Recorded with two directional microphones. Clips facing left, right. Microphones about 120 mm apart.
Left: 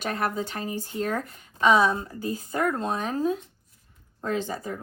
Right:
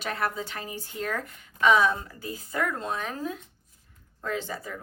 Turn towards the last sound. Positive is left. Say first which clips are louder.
# left 4 dB
turn(degrees=40)  # may be behind; listen again after turning